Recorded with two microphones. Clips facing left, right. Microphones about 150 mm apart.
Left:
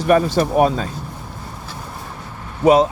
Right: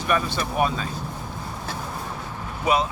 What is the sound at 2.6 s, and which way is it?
Speech, 35° left (ahead or behind).